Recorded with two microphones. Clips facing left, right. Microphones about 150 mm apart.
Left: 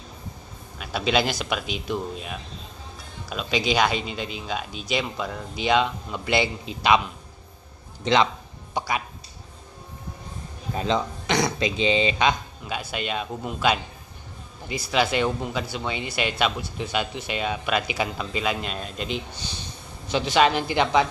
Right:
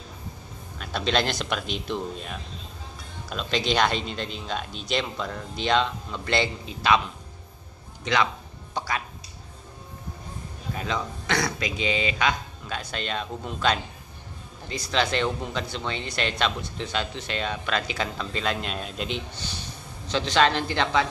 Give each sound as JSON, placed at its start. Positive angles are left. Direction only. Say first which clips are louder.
{"t": 0.7, "sound": "speech", "louder": "left 2 dB", "side_deg": 5}
{"t": 8.0, "sound": "a man's voice", "louder": "left 4 dB", "side_deg": 25}
{"t": 8.7, "sound": "speech", "louder": "left 3 dB", "side_deg": 15}
{"t": 10.7, "sound": "speech", "louder": "left 5 dB", "side_deg": 25}
{"t": 12.6, "sound": "speech", "louder": "left 3 dB", "side_deg": 10}
{"t": 20.1, "sound": "speech", "louder": "left 2 dB", "side_deg": 10}